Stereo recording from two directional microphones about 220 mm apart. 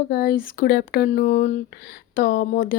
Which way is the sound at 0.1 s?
45° left (ahead or behind).